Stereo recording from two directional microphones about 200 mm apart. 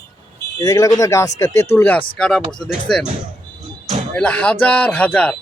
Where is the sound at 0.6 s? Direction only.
15° left (ahead or behind).